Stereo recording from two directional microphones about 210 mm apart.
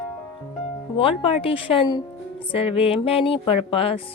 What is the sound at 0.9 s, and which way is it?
Speech, 25° left (ahead or behind).